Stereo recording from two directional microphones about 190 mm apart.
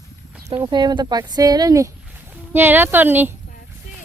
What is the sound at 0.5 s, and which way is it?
Speech, 25° right (ahead or behind).